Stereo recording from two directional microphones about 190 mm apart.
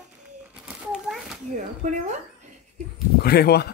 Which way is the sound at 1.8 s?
40° right (ahead or behind).